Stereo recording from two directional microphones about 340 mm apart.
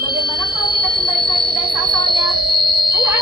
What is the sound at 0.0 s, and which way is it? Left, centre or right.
Music, right.